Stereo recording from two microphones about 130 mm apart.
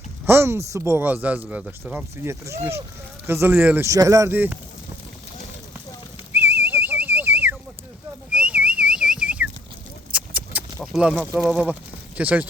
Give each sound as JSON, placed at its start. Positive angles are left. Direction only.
{"t": 0.3, "sound": "speech", "side_deg": -20}
{"t": 3.8, "sound": "speech", "side_deg": -25}
{"t": 4.3, "sound": "speech", "side_deg": -15}
{"t": 6.3, "sound": "whistle", "side_deg": -15}
{"t": 8.3, "sound": "whistling", "side_deg": -10}
{"t": 10.1, "sound": "a sound", "side_deg": -10}
{"t": 10.9, "sound": "speech", "side_deg": -5}